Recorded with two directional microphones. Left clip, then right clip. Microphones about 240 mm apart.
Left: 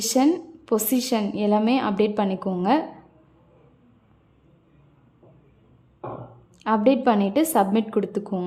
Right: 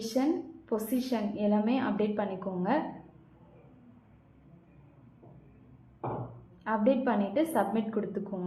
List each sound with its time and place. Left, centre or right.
0.1 s a woman's voice: left
6.7 s a woman's voice: left